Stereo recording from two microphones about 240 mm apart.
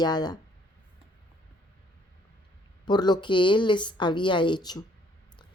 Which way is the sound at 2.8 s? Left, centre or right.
Centre.